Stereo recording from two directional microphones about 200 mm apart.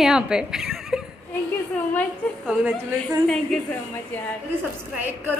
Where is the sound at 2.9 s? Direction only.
5° left (ahead or behind).